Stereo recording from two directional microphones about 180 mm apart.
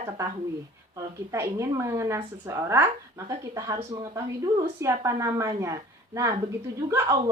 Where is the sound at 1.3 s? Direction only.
15° right (ahead or behind).